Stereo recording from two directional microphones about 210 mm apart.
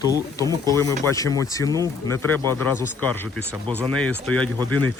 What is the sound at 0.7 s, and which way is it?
Speech, 15° left (ahead or behind).